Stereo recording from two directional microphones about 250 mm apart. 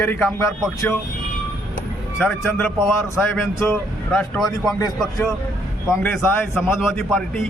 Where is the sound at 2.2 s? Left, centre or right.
Centre.